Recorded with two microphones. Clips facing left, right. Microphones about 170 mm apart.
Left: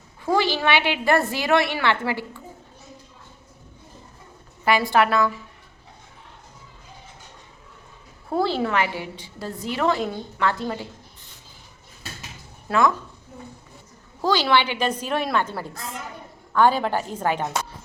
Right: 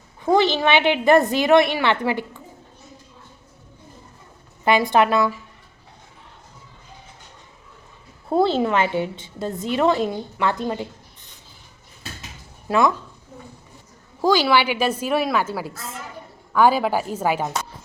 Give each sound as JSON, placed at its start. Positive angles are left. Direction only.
{"t": 0.3, "sound": "a woman's voice", "side_deg": -20}
{"t": 4.6, "sound": "a woman's voice", "side_deg": -20}
{"t": 8.3, "sound": "a woman's voice", "side_deg": -25}
{"t": 12.6, "sound": "speech", "side_deg": -15}
{"t": 14.2, "sound": "a woman's voice", "side_deg": -10}